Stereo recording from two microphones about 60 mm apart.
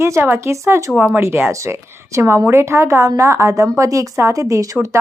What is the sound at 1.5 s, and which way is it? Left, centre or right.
A woman's voice, right.